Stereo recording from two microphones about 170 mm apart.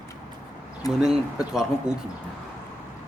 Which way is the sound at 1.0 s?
5° right (ahead or behind).